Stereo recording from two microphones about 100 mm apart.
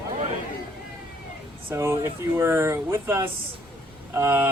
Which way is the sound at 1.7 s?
25° right (ahead or behind).